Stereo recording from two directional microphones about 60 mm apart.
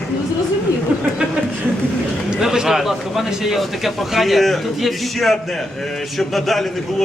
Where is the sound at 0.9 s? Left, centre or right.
Right.